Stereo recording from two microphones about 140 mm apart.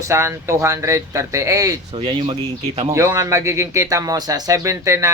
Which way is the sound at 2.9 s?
20° right (ahead or behind).